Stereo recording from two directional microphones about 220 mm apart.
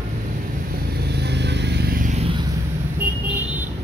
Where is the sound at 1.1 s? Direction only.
50° right (ahead or behind); by 2.3 s 35° right (ahead or behind).